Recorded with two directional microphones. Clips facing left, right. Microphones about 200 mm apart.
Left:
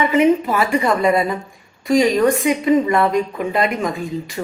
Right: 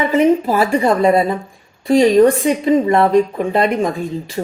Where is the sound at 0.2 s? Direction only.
35° right (ahead or behind).